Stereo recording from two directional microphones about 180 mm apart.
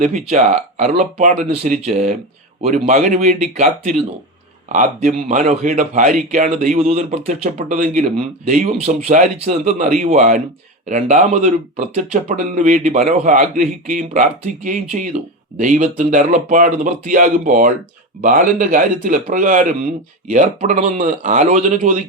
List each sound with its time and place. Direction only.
0.0 s a man's voice: 40° right (ahead or behind)